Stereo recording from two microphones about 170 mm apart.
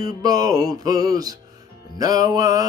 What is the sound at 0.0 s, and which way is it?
Mantra, 20° right (ahead or behind).